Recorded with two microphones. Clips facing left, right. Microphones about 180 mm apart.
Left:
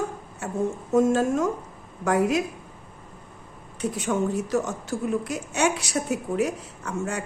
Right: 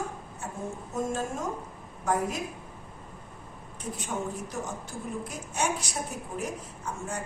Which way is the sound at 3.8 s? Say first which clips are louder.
Left 9 dB; 80° left.